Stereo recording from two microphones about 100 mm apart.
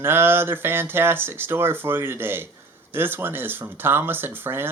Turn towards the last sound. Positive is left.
turn(degrees=-20)  # may be behind; listen again after turning